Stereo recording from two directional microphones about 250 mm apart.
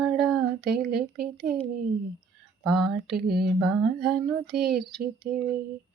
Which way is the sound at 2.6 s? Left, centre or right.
Centre.